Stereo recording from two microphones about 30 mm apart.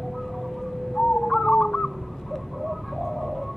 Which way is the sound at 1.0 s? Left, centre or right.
Centre.